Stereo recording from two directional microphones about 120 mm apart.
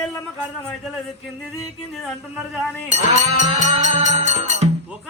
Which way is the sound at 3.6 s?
70° right (ahead or behind).